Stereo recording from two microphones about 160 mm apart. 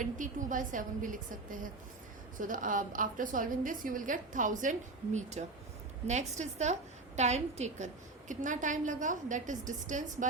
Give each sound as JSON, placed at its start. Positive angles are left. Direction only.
{"t": 0.0, "sound": "a woman's voice", "side_deg": -55}